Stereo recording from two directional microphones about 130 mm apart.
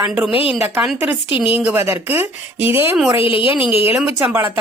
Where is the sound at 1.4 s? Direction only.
15° right (ahead or behind).